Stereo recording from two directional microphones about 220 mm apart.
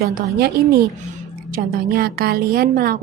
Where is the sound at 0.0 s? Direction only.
40° right (ahead or behind).